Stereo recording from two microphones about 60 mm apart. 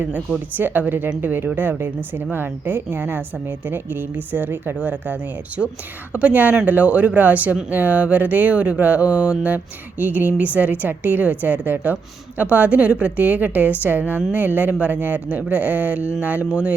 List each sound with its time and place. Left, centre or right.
0.0 s a woman's voice: right
6.1 s a woman's voice: right